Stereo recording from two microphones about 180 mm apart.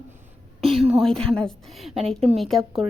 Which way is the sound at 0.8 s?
Centre (ahead or behind).